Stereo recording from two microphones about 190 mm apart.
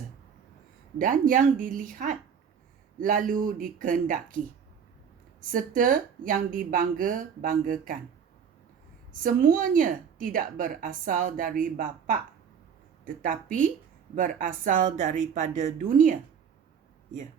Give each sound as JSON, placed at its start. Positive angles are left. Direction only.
{"t": 0.9, "sound": "a woman's voice", "side_deg": -45}
{"t": 5.4, "sound": "a woman's voice", "side_deg": -45}
{"t": 9.2, "sound": "a woman's voice", "side_deg": -45}